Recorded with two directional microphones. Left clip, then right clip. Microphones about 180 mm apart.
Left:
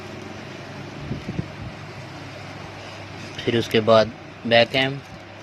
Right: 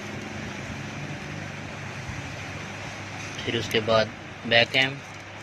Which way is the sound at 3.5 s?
45° left (ahead or behind).